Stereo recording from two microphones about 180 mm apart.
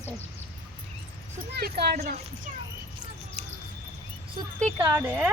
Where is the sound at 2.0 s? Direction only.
50° right (ahead or behind).